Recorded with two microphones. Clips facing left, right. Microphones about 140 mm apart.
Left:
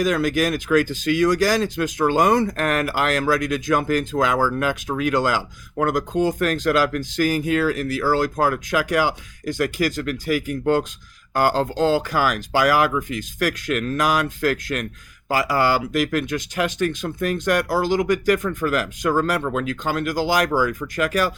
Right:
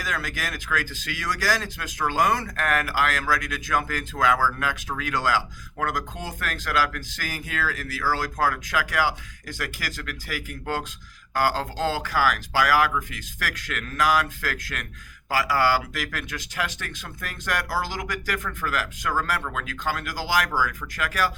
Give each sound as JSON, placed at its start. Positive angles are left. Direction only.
{"t": 0.0, "sound": "speech", "side_deg": 20}